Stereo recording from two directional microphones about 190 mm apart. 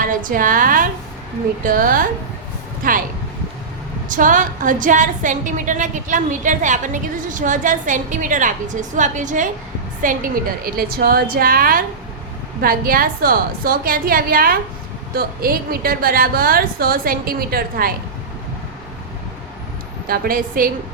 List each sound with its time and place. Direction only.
0.0 s a woman's voice: 45° right (ahead or behind)
4.1 s a woman's voice: 45° right (ahead or behind)
20.1 s a woman's voice: 50° right (ahead or behind)